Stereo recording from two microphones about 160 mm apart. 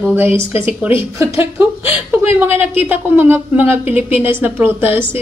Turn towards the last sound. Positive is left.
turn(degrees=-15)  # may be behind; listen again after turning